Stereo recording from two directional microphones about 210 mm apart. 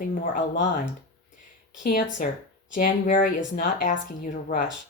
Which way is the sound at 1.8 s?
40° left (ahead or behind).